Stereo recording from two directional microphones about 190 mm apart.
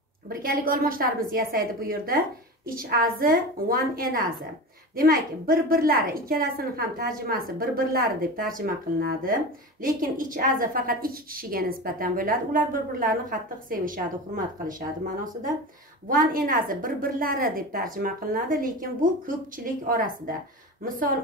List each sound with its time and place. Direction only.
0.3 s a woman's voice: 50° right (ahead or behind)
16.4 s a woman's voice: 50° right (ahead or behind)